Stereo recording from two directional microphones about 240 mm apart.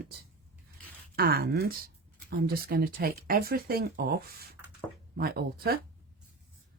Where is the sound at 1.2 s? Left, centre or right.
Right.